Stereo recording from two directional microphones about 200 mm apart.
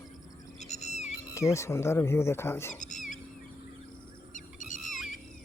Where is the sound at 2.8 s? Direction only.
40° left (ahead or behind).